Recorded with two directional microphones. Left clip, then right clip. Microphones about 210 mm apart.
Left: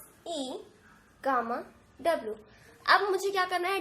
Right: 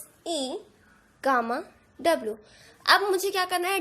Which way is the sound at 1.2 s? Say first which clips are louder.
Right 5 dB; 45° right (ahead or behind).